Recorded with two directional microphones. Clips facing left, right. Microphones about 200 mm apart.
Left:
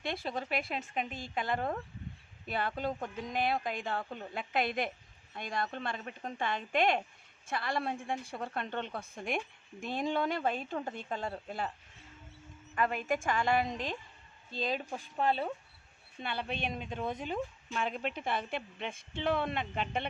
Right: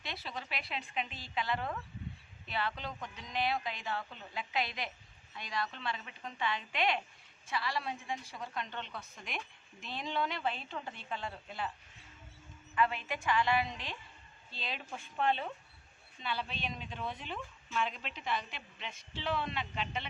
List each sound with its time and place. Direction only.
0.0 s speech: 50° left (ahead or behind)
12.7 s speech: 45° left (ahead or behind)
16.2 s speech: 55° left (ahead or behind)